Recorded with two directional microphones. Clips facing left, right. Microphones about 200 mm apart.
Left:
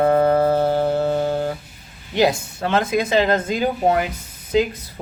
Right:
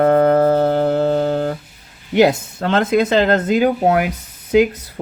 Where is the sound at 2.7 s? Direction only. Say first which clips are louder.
Right 4 dB; 60° right (ahead or behind).